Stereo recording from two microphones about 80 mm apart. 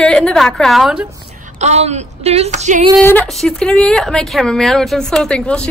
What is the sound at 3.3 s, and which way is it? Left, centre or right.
Speech, centre.